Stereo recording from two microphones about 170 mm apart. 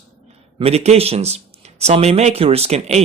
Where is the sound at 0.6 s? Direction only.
40° right (ahead or behind).